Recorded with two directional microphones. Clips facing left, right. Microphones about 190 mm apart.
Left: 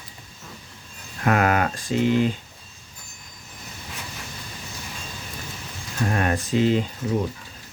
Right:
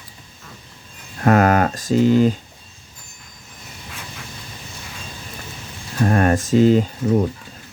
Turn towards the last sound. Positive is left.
turn(degrees=-40)  # may be behind; listen again after turning